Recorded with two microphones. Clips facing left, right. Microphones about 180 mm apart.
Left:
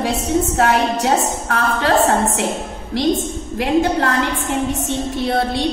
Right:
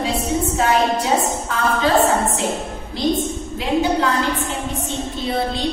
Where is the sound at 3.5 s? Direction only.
75° left (ahead or behind).